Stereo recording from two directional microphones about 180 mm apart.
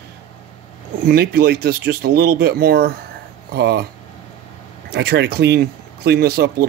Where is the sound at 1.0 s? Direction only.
60° right (ahead or behind).